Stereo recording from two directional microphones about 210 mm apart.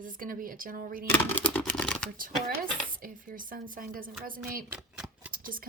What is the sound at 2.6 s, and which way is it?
Speech, 40° right (ahead or behind).